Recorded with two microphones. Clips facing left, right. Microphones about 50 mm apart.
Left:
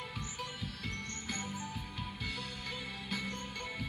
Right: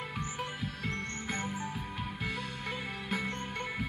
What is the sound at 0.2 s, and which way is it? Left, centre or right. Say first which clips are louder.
Music: right 5 dB; right.